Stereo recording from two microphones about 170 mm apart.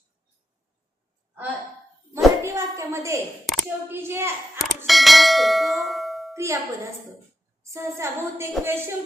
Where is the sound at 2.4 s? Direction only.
15° right (ahead or behind).